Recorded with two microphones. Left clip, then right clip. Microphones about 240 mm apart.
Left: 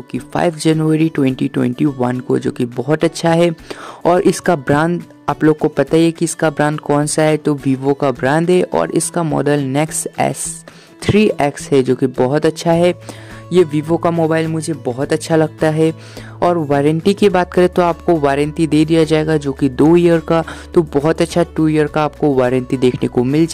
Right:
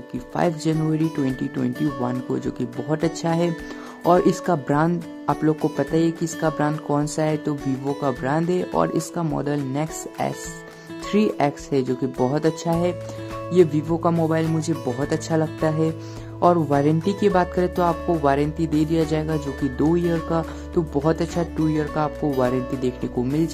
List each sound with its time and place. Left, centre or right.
0.1 s speech: left